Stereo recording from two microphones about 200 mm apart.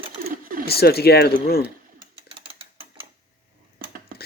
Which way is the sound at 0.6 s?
50° left (ahead or behind).